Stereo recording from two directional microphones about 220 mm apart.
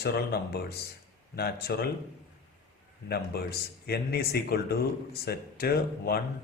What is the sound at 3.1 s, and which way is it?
Speech, 45° left (ahead or behind).